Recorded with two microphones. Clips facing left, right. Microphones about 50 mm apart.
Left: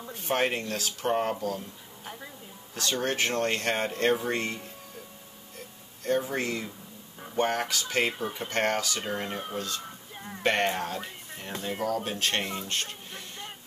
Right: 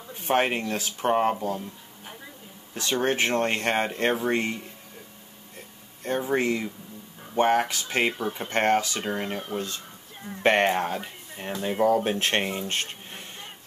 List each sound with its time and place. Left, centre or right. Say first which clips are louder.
0.1 s speech: right 4 dB; right
2.7 s speech: right 4 dB; right
6.0 s speech: right 3 dB; right
10.4 s speech: right 5 dB; right